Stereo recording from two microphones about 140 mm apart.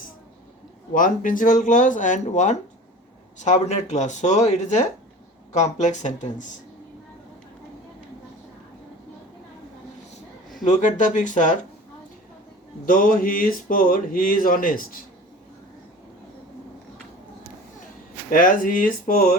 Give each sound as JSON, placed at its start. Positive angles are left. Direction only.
{"t": 0.9, "sound": "speech", "side_deg": 75}
{"t": 10.6, "sound": "speech", "side_deg": 60}
{"t": 12.8, "sound": "speech", "side_deg": 75}
{"t": 18.3, "sound": "speech", "side_deg": 70}